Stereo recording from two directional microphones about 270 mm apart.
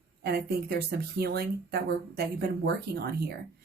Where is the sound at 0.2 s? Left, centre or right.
Right.